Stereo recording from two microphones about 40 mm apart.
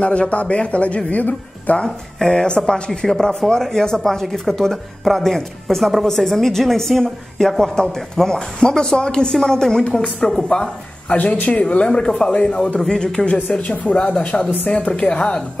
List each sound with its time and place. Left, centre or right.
0.0 s a man's voice: left
2.1 s speech: centre
11.1 s a man's voice: left